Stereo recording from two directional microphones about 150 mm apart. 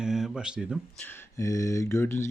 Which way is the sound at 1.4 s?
20° left (ahead or behind).